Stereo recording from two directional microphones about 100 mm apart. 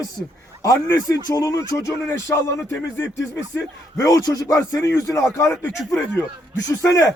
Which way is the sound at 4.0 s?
35° left (ahead or behind).